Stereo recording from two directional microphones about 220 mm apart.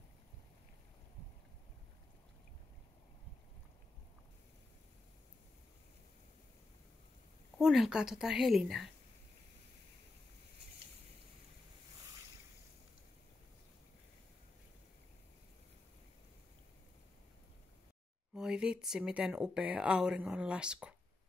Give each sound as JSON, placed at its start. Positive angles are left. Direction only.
{"t": 7.5, "sound": "speech", "side_deg": 0}
{"t": 18.3, "sound": "speech", "side_deg": -5}